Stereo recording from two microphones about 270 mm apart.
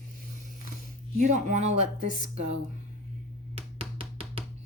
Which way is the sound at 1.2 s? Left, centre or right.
Right.